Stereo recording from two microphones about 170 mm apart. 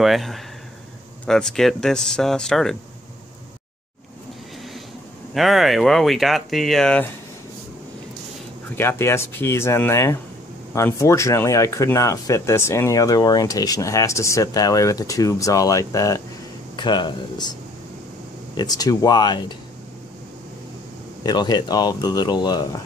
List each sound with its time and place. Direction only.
0.0 s speech: centre (ahead or behind)
5.3 s speech: centre (ahead or behind)
8.7 s speech: 15° left (ahead or behind)
21.2 s speech: 25° left (ahead or behind)